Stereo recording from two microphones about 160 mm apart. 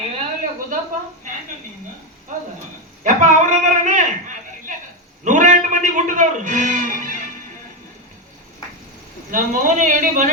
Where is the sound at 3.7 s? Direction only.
50° right (ahead or behind).